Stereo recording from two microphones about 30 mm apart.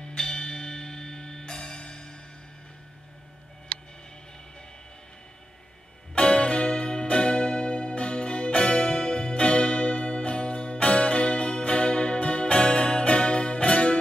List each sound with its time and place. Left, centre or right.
0.0 s music: left
6.1 s music: left